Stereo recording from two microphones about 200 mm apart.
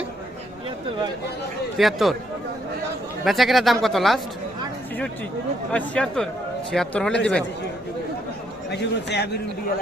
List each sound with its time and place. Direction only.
1.8 s speech: centre (ahead or behind)
3.2 s speech: centre (ahead or behind)
5.7 s speech: 5° left (ahead or behind)
8.7 s a man's voice: 60° left (ahead or behind)